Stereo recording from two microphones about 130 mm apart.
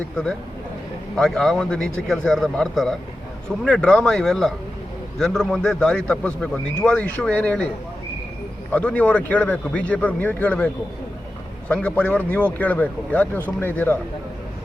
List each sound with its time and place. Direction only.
1.1 s a man's voice: 5° left (ahead or behind)
8.7 s a man's voice: 10° left (ahead or behind)
11.7 s a man's voice: 10° left (ahead or behind)